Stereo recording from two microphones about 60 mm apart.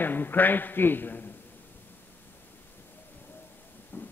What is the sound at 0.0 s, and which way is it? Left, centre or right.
A man's voice, left.